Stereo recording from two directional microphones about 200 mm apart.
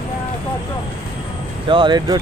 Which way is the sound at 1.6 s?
25° right (ahead or behind).